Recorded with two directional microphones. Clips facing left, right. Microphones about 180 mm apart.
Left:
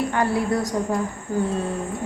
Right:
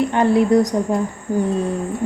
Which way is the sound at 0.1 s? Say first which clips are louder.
Right 7 dB; 20° right (ahead or behind).